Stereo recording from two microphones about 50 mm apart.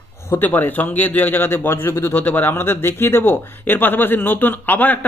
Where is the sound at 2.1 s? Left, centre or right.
Left.